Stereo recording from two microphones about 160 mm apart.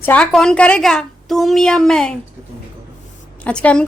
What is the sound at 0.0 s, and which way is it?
A woman's voice, 10° left (ahead or behind).